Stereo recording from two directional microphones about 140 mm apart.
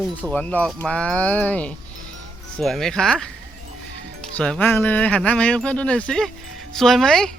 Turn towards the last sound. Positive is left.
turn(degrees=5)  # may be behind; listen again after turning